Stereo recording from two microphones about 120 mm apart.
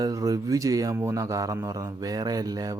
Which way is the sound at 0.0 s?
30° right (ahead or behind).